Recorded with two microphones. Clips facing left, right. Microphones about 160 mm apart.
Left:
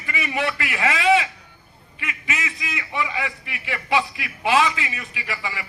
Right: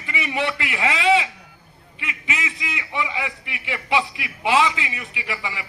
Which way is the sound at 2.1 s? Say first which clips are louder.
Right 1 dB; 20° right (ahead or behind).